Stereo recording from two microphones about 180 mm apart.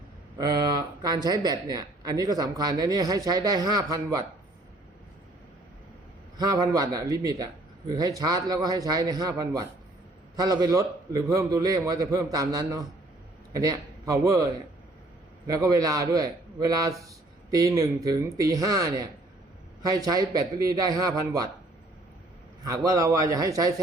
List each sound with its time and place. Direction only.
0.3 s speech: 20° right (ahead or behind)
6.3 s a man's voice: 20° right (ahead or behind)
22.6 s speech: 20° right (ahead or behind)